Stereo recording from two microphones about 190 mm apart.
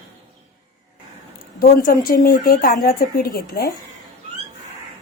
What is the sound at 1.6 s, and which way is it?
Speech, 50° left (ahead or behind).